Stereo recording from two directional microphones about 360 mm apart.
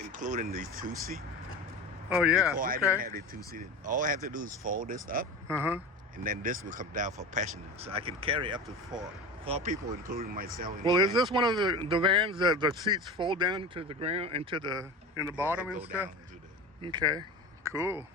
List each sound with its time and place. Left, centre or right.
0.1 s speech: right
2.0 s speech: centre
2.6 s speech: right
5.5 s speech: centre
6.2 s speech: right
8.9 s speech: centre
9.5 s speech: centre
10.1 s speech: right
10.7 s speech: centre